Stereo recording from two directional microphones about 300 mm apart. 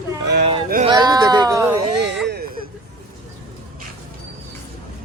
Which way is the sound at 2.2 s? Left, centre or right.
Right.